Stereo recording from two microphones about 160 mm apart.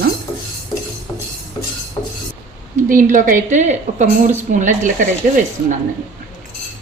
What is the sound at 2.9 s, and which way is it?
A woman's voice, 55° right (ahead or behind).